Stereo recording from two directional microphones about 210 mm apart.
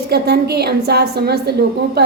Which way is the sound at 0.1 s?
50° right (ahead or behind).